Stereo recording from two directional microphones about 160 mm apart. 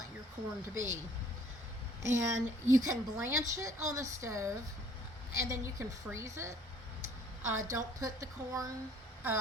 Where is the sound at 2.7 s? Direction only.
20° right (ahead or behind).